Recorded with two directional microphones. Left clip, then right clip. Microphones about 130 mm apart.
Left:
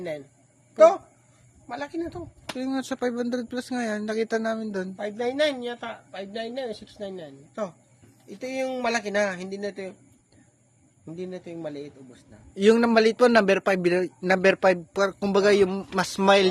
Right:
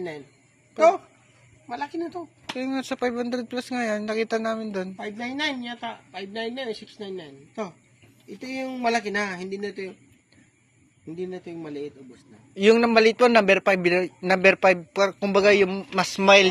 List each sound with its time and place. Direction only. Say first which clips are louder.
1.6 s speech: right 1 dB; 45° left (ahead or behind)
4.9 s speech: left 5 dB; 45° left (ahead or behind)
11.2 s speech: right 1 dB; 45° left (ahead or behind)